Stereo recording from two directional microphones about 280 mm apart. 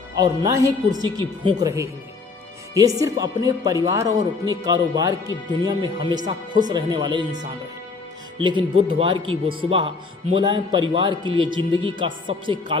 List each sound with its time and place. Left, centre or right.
0.2 s speech: centre
8.4 s speech: centre